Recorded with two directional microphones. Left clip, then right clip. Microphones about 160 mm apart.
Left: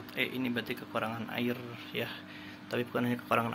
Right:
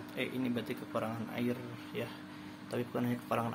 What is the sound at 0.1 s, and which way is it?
Speech, 5° right (ahead or behind).